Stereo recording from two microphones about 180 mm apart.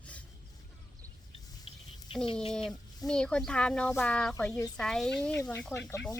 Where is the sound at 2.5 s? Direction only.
5° left (ahead or behind).